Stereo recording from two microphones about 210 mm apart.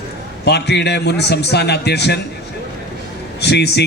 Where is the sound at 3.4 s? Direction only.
50° left (ahead or behind).